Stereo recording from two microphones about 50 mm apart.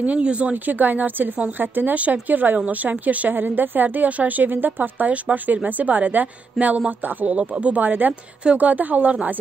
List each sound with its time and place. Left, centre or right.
0.0 s speech: right
7.3 s speech: right
7.8 s speech: right